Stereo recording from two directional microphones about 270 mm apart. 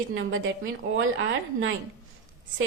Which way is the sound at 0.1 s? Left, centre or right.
Right.